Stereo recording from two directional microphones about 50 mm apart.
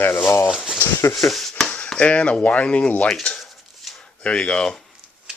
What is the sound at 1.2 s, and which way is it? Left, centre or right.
Speech, left.